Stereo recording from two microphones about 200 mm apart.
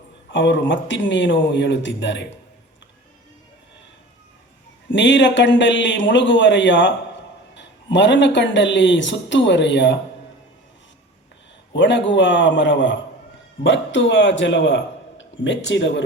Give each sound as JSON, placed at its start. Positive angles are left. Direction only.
{"t": 0.3, "sound": "speech", "side_deg": 65}
{"t": 4.9, "sound": "speech", "side_deg": 65}
{"t": 11.7, "sound": "speech", "side_deg": 65}